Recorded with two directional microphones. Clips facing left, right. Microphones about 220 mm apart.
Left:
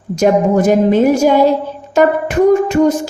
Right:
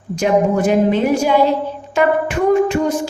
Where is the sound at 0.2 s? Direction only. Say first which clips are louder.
Left 3 dB; 40° left (ahead or behind).